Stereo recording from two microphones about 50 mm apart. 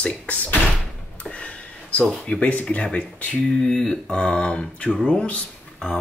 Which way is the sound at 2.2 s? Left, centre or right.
Left.